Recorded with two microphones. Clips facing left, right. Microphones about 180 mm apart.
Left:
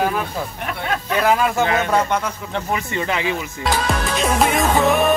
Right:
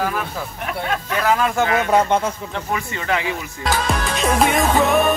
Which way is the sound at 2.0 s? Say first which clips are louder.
Right 3 dB; 25° right (ahead or behind).